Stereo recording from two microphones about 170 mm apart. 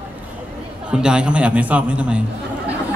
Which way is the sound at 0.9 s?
5° right (ahead or behind).